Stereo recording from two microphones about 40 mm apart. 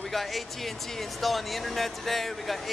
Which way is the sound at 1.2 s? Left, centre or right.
Centre.